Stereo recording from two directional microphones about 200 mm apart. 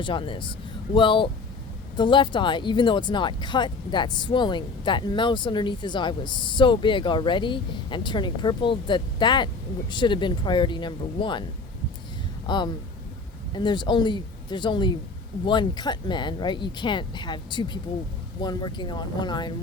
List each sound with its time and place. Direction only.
0.0 s speech: 25° left (ahead or behind)
12.5 s speech: 20° left (ahead or behind)